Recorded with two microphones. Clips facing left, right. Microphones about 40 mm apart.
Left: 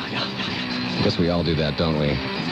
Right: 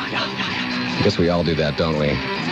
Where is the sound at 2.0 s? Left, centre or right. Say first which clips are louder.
Right 3 dB; centre.